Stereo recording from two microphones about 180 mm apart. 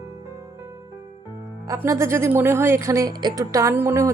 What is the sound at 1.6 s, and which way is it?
Speech, 15° right (ahead or behind).